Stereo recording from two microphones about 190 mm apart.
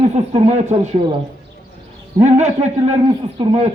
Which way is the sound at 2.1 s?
35° right (ahead or behind).